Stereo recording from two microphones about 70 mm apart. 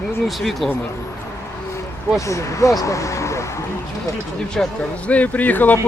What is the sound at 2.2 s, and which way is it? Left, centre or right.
Speech, left.